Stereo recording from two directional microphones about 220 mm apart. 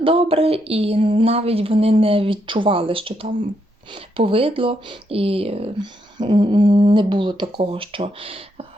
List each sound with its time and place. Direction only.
0.0 s speech: 25° right (ahead or behind)